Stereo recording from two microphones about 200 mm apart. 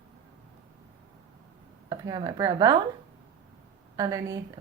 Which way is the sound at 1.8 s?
20° right (ahead or behind).